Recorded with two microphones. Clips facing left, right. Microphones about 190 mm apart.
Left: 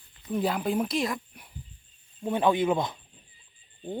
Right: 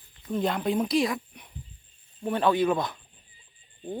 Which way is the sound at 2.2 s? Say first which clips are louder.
Even; 15° left (ahead or behind).